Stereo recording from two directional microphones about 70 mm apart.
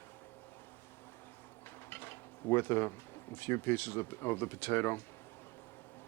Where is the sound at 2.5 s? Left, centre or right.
Left.